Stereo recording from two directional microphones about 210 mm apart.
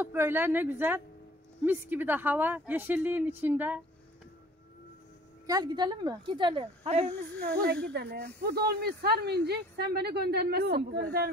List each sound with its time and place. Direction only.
0.0 s speech: 10° right (ahead or behind)
5.5 s speech: 20° right (ahead or behind)
7.5 s a woman's voice: 45° right (ahead or behind)